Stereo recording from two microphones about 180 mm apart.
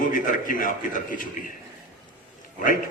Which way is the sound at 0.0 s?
45° left (ahead or behind).